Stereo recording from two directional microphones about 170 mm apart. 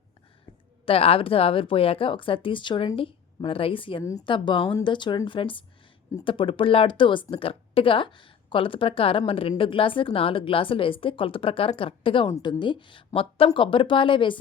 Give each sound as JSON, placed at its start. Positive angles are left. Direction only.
{"t": 0.9, "sound": "speech", "side_deg": 35}